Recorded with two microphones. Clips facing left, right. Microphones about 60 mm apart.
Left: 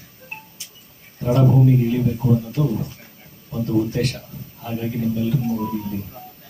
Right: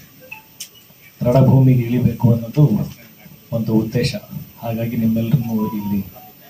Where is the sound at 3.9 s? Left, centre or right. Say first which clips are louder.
Right 3 dB; right.